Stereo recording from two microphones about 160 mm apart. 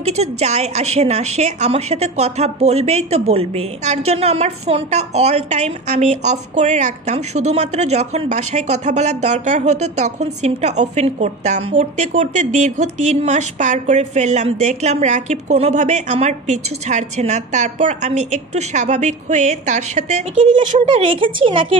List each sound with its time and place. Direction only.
0.0 s a woman's voice: 45° right (ahead or behind)
20.8 s speech: 35° right (ahead or behind)